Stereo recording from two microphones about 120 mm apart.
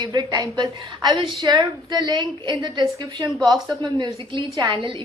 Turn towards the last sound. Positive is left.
turn(degrees=-40)  # may be behind; listen again after turning